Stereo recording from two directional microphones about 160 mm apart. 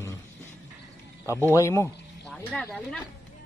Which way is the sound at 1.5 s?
20° left (ahead or behind).